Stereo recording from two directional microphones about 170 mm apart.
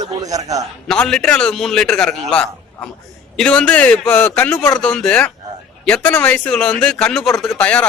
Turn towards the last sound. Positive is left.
turn(degrees=5)  # may be behind; listen again after turning